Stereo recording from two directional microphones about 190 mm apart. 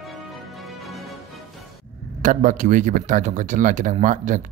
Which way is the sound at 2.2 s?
45° right (ahead or behind).